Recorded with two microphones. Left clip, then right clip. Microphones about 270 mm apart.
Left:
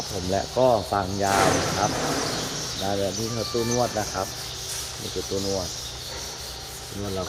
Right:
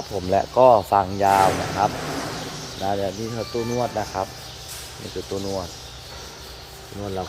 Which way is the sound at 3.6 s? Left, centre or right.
Centre.